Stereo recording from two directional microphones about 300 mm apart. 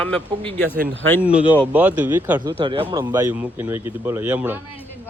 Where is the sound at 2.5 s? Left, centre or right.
Centre.